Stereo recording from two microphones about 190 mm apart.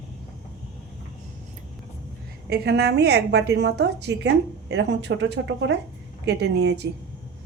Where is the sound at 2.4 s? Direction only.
60° right (ahead or behind).